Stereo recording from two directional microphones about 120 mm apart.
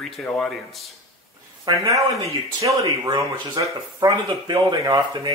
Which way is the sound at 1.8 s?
25° right (ahead or behind).